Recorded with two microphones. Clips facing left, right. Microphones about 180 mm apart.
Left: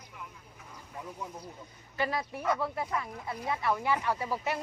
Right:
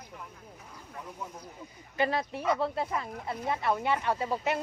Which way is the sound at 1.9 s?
25° right (ahead or behind).